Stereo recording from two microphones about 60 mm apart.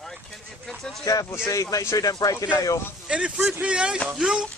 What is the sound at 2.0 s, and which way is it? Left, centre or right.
Speech, left.